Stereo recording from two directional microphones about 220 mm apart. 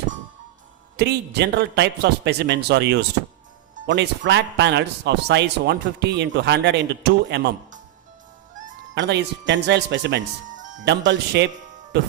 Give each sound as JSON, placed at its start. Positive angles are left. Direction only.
{"t": 0.9, "sound": "speech", "side_deg": -50}
{"t": 9.0, "sound": "speech", "side_deg": -50}